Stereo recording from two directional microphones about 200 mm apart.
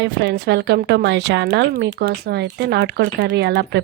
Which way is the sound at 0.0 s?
60° right (ahead or behind).